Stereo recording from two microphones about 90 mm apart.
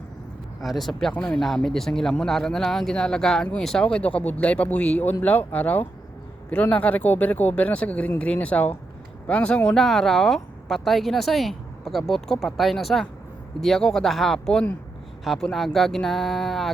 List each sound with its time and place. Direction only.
0.6 s speech: centre (ahead or behind)
1.1 s speech: 15° left (ahead or behind)
1.4 s speech: 5° left (ahead or behind)
3.9 s speech: 15° left (ahead or behind)